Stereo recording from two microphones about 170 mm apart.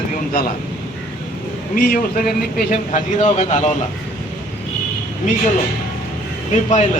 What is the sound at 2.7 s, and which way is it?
A man's voice, 45° left (ahead or behind).